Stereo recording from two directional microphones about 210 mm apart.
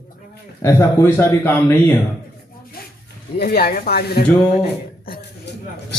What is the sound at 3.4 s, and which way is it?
Speech, 45° left (ahead or behind).